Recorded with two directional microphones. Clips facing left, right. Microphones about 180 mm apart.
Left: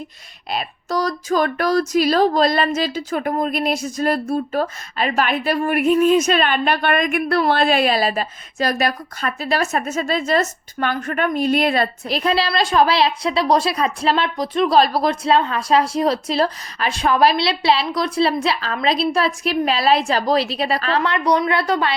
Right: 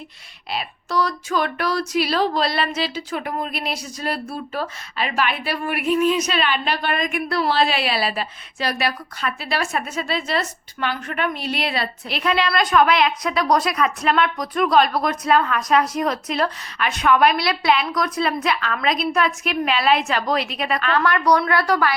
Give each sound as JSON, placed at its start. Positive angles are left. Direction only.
{"t": 0.5, "sound": "a woman's voice", "side_deg": 40}